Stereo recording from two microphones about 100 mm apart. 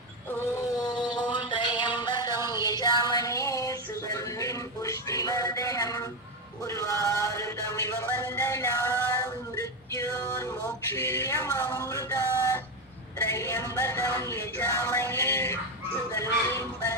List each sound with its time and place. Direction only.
0.8 s music: 45° left (ahead or behind)
10.9 s speech: 25° left (ahead or behind)
11.9 s a sound: 30° left (ahead or behind)
13.3 s music: 30° left (ahead or behind)
16.1 s speech: 30° left (ahead or behind)